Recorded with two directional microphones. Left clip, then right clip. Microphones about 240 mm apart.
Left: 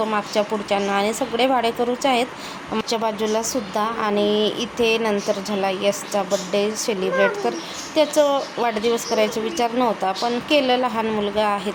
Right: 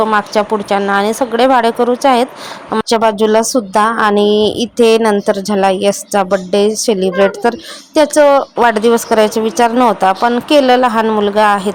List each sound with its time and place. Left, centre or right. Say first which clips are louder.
0.0 s speech: right 9 dB; right